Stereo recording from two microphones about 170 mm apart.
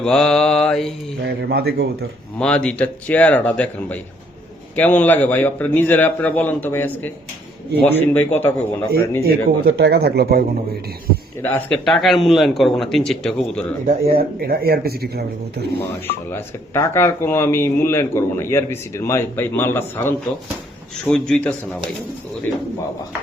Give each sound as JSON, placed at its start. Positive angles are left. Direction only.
{"t": 0.0, "sound": "a man's voice", "side_deg": 5}
{"t": 1.4, "sound": "speech", "side_deg": -65}
{"t": 2.4, "sound": "speech", "side_deg": 5}
{"t": 9.2, "sound": "speech", "side_deg": -65}
{"t": 11.4, "sound": "a man's voice", "side_deg": 5}
{"t": 13.8, "sound": "speech", "side_deg": -60}
{"t": 16.3, "sound": "a man's voice", "side_deg": 15}